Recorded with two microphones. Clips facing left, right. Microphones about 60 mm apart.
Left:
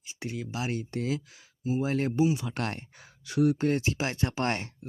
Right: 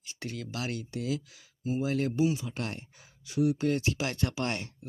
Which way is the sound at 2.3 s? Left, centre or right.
Left.